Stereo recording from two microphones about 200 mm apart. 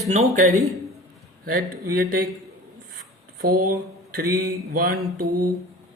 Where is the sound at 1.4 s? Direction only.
45° right (ahead or behind).